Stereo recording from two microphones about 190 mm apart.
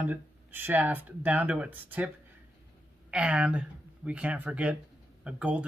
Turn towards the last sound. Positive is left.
turn(degrees=-5)  # may be behind; listen again after turning